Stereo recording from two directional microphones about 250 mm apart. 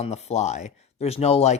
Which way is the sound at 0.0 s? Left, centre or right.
Left.